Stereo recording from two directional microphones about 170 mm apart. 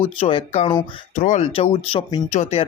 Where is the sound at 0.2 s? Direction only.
35° left (ahead or behind).